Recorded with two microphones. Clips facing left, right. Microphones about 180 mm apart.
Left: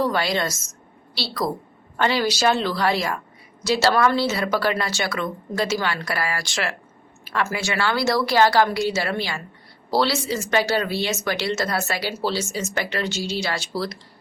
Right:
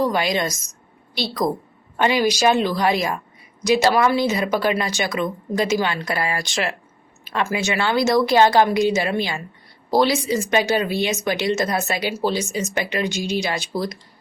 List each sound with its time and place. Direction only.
0.0 s a woman's voice: 15° right (ahead or behind)